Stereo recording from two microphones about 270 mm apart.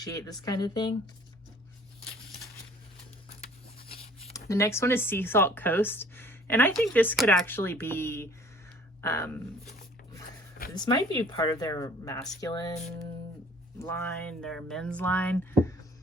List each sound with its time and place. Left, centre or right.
0.0 s speech: centre
3.4 s a sound: left
4.4 s speech: centre
10.8 s speech: centre
13.7 s speech: centre